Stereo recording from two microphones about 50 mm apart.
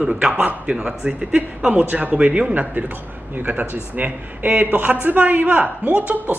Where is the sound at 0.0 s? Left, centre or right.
Centre.